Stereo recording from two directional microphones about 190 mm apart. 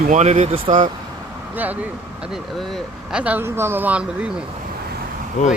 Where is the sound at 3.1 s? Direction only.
5° right (ahead or behind).